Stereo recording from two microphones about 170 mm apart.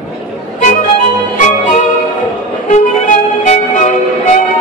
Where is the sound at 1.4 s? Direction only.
45° left (ahead or behind).